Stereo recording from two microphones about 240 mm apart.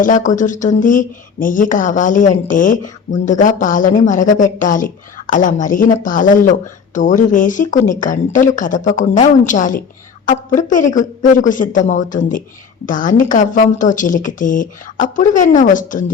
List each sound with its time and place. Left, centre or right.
0.0 s speech: left